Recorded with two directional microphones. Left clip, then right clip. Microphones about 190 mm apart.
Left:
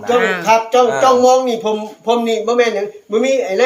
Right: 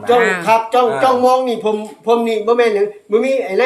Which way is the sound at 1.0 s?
10° right (ahead or behind).